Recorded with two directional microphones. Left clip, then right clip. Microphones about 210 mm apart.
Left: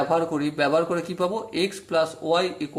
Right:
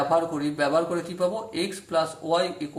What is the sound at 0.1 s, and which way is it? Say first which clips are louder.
A man's voice: even; 40° left (ahead or behind).